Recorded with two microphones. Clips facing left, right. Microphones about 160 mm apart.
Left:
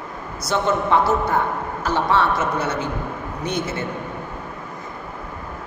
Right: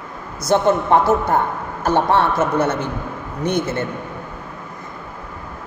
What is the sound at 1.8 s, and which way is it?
A man's voice, 55° right (ahead or behind).